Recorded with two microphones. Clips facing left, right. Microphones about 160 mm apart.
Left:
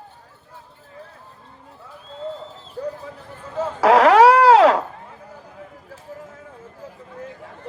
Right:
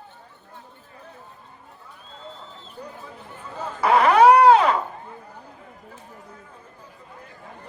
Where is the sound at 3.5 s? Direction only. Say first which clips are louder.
Left 5 dB; 90° left.